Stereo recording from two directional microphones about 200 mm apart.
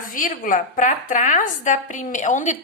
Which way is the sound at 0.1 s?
40° left (ahead or behind).